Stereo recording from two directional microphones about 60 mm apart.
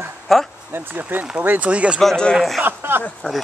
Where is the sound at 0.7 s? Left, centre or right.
Right.